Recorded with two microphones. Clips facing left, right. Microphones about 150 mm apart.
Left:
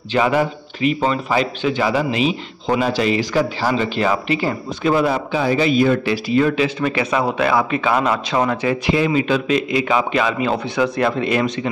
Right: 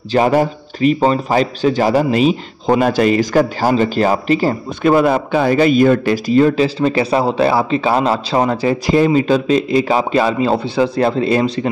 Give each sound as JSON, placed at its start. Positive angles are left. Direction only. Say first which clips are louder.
{"t": 0.1, "sound": "a man's voice", "louder": "right 4 dB", "side_deg": -40}